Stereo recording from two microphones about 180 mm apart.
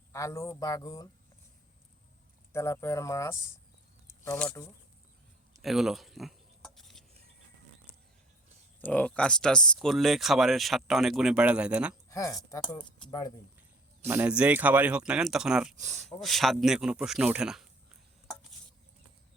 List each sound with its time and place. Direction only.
0.1 s speech: 15° left (ahead or behind)
2.5 s speech: 15° left (ahead or behind)
4.4 s speech: 10° left (ahead or behind)
5.6 s a sound: centre (ahead or behind)
8.8 s speech: 5° left (ahead or behind)
12.0 s a woman's voice: 20° left (ahead or behind)
14.1 s speech: 10° right (ahead or behind)
15.8 s speech: 40° right (ahead or behind)
16.2 s speech: centre (ahead or behind)